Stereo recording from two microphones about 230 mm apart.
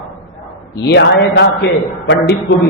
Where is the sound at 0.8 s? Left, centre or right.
Left.